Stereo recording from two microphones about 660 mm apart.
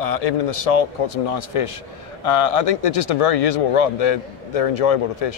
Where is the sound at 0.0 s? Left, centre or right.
Left.